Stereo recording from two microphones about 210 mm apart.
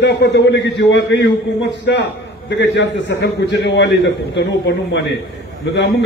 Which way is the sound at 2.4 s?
55° left (ahead or behind).